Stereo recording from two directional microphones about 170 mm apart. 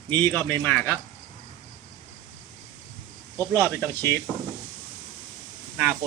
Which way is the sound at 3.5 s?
10° left (ahead or behind).